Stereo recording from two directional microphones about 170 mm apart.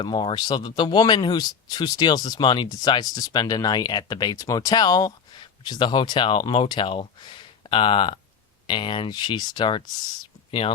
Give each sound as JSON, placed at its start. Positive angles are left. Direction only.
{"t": 0.0, "sound": "speech", "side_deg": 25}